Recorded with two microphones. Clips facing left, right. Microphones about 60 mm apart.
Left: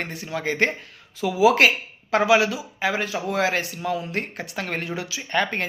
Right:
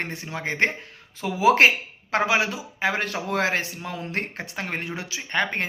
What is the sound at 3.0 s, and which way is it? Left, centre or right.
Speech, right.